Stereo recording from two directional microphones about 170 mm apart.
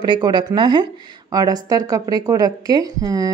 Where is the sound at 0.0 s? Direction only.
25° right (ahead or behind).